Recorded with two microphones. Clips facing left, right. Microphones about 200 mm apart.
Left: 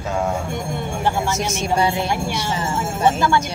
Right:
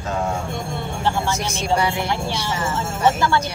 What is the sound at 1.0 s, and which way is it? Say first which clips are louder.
Speech: left 1 dB; 20° left (ahead or behind).